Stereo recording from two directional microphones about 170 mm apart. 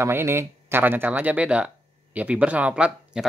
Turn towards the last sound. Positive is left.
turn(degrees=-5)  # may be behind; listen again after turning